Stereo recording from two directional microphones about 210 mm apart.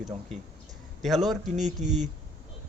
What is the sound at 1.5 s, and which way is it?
Speech, 35° right (ahead or behind).